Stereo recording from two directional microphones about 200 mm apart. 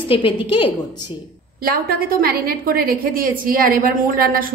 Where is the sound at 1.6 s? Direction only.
45° right (ahead or behind).